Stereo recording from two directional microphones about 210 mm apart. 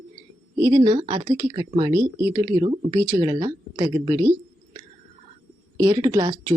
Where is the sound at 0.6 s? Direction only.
20° right (ahead or behind).